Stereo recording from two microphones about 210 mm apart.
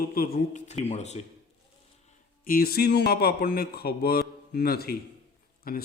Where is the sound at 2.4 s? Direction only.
45° left (ahead or behind).